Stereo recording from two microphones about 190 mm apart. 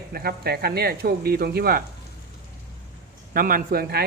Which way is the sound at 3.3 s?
50° right (ahead or behind).